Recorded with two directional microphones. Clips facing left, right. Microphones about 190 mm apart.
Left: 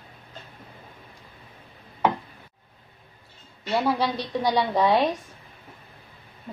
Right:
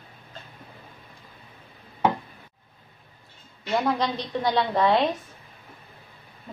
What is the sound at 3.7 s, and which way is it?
A woman's voice, 10° left (ahead or behind).